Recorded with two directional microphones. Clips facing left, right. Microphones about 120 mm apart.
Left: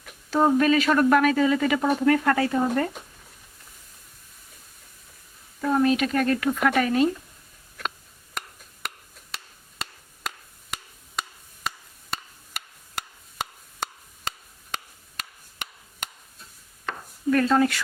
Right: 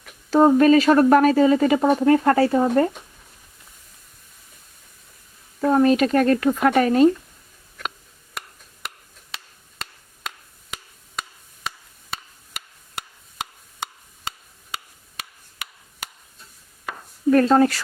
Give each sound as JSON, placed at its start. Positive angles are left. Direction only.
{"t": 0.3, "sound": "speech", "side_deg": -35}
{"t": 5.5, "sound": "speech", "side_deg": -40}
{"t": 8.4, "sound": "a sound", "side_deg": 0}
{"t": 9.3, "sound": "chop", "side_deg": 0}
{"t": 10.3, "sound": "wood block", "side_deg": 0}
{"t": 16.9, "sound": "chopping", "side_deg": -10}
{"t": 17.3, "sound": "speech", "side_deg": -35}